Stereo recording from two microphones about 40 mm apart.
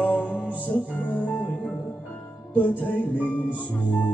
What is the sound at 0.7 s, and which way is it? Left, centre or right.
Speech, left.